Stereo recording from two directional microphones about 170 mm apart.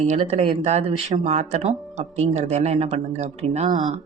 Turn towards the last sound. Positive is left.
turn(degrees=-50)  # may be behind; listen again after turning